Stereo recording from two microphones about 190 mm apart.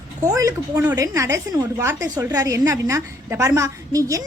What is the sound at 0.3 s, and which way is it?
A woman's voice, 15° right (ahead or behind).